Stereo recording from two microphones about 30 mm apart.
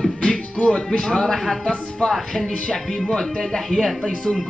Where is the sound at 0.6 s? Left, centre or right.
Left.